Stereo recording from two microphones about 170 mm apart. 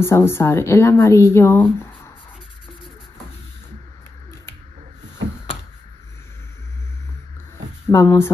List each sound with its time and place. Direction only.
0.0 s speech: 15° left (ahead or behind)
7.9 s speech: 20° left (ahead or behind)